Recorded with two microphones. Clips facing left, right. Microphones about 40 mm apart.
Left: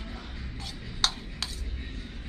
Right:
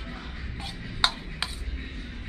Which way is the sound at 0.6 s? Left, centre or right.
Right.